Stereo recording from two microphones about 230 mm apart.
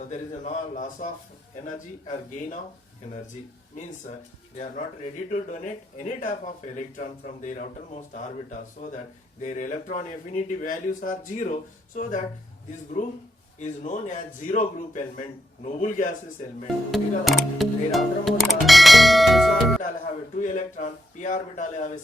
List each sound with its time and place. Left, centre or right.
0.1 s speech: left
4.5 s speech: left
16.9 s speech: centre
20.3 s speech: left